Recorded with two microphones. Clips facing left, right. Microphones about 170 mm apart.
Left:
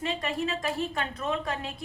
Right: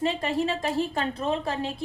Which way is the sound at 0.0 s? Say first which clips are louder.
Right 5 dB; 30° right (ahead or behind).